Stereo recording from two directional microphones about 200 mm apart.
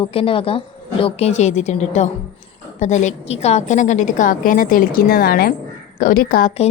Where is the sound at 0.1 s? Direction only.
25° left (ahead or behind); by 6.5 s 45° left (ahead or behind).